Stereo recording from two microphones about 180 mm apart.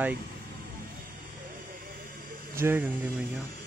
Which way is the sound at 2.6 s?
10° right (ahead or behind).